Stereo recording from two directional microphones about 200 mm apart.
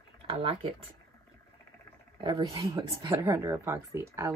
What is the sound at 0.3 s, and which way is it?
Speech, 25° right (ahead or behind).